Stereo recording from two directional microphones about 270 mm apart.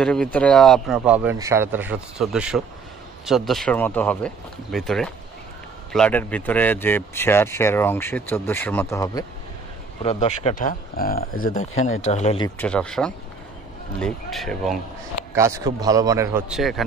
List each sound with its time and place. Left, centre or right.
0.0 s a man's voice: centre
10.0 s speech: left
12.4 s a man's voice: centre
15.3 s a man's voice: centre